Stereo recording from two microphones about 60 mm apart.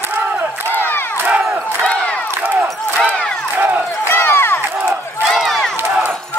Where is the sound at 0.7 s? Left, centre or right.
Left.